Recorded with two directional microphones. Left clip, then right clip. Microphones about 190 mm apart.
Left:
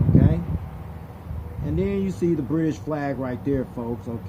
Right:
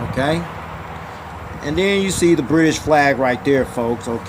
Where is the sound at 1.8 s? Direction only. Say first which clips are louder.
Right 9 dB; 10° right (ahead or behind).